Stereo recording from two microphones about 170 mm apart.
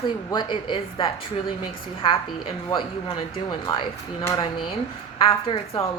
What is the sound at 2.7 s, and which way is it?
A woman's voice, 25° left (ahead or behind).